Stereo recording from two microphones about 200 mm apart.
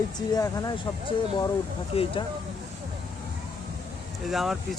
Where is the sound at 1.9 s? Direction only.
30° left (ahead or behind).